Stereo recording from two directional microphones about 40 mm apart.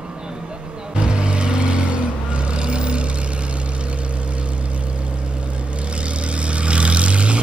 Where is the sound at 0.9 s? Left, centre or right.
Right.